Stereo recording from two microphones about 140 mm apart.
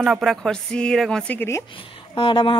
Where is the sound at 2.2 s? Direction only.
35° left (ahead or behind).